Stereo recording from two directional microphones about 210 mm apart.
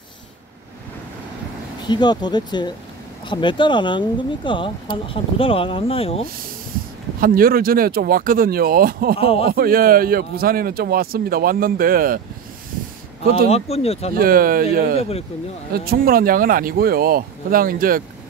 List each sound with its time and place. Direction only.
1.9 s speech: 20° left (ahead or behind)
7.2 s a man's voice: 45° right (ahead or behind)
9.2 s speech: 25° left (ahead or behind)
9.5 s a man's voice: 45° right (ahead or behind)
13.5 s speech: 30° left (ahead or behind)
14.1 s a man's voice: 45° right (ahead or behind)
15.0 s speech: 30° left (ahead or behind)
15.7 s a man's voice: 45° right (ahead or behind)